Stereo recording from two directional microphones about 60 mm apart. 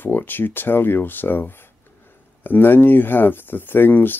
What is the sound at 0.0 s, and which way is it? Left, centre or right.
Speech, left.